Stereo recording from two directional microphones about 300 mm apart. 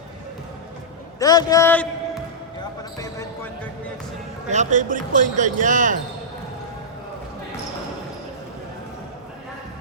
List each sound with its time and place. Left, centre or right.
1.2 s a man's voice: centre
3.0 s basketball bounce: centre
4.4 s speech: right